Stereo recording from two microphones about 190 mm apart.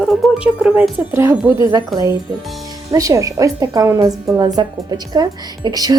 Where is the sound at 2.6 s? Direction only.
20° right (ahead or behind).